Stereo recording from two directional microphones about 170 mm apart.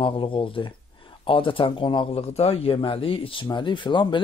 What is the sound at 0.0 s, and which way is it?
Speech, 30° left (ahead or behind).